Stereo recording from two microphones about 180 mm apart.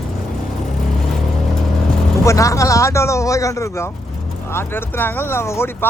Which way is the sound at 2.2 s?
15° left (ahead or behind).